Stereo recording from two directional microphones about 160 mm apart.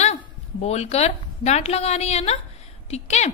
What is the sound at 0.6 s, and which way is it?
A woman's voice, 40° left (ahead or behind).